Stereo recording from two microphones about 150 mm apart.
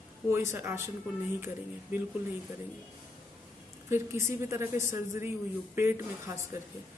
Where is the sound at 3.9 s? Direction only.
15° right (ahead or behind).